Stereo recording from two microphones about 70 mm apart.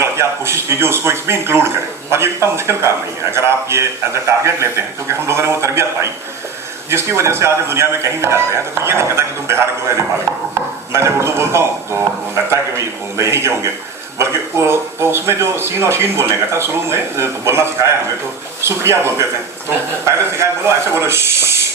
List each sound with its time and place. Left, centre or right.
0.0 s speech: right